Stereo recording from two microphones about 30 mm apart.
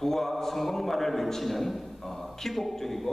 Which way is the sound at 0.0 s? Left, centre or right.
Centre.